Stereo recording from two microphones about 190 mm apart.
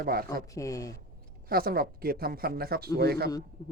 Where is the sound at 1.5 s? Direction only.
50° right (ahead or behind).